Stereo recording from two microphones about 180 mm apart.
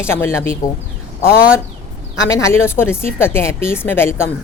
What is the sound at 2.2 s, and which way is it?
A woman's voice, 15° left (ahead or behind).